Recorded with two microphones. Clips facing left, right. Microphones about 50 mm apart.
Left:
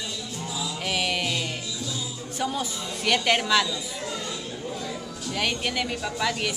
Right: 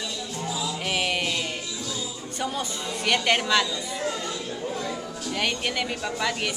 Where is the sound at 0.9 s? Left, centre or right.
Centre.